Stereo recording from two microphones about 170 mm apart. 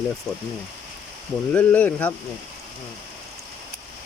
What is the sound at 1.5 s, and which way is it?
Speech, 10° left (ahead or behind).